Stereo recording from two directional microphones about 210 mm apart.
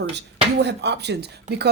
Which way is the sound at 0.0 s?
55° right (ahead or behind).